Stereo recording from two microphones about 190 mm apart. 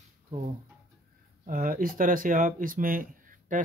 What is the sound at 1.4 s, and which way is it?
Speech, 50° right (ahead or behind).